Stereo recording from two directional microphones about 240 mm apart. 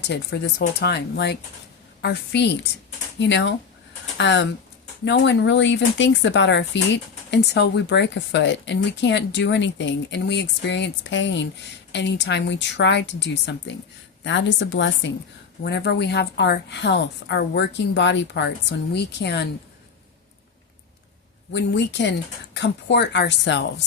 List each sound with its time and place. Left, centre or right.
0.0 s speech: left
21.5 s speech: left